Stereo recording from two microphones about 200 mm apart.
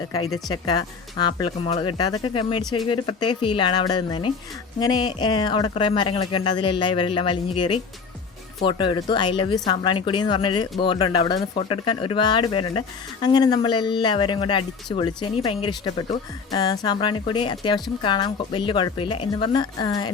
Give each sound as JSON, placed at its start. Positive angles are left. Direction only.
{"t": 0.3, "sound": "speech", "side_deg": 20}